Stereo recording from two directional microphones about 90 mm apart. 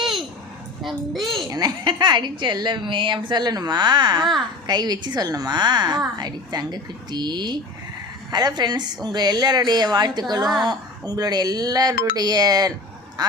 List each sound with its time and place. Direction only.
0.0 s a sound: centre (ahead or behind)
0.8 s a child's voice: centre (ahead or behind)
1.5 s a woman's voice: 50° right (ahead or behind)